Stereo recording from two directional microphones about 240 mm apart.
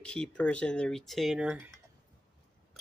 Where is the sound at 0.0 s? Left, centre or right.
Centre.